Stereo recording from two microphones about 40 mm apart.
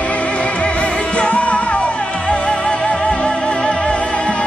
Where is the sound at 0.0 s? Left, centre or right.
Left.